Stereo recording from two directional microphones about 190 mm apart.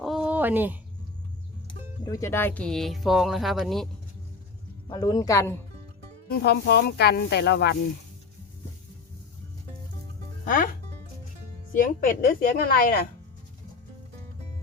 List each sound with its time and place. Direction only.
0.0 s a sound: centre (ahead or behind)
2.0 s speech: 15° left (ahead or behind); by 3.8 s centre (ahead or behind)
4.9 s speech: 20° left (ahead or behind)
6.2 s music: 55° left (ahead or behind)
10.4 s music: 45° left (ahead or behind)
11.7 s speech: 45° left (ahead or behind)